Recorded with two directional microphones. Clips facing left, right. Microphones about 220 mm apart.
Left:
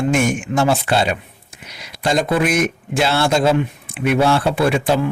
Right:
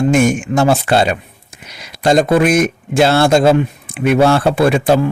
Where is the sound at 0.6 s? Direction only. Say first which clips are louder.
Right 4 dB; 45° right (ahead or behind).